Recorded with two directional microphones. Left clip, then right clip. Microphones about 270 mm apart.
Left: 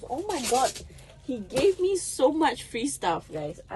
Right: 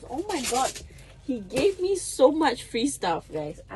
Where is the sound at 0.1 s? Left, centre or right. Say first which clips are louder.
Left 1 dB; left.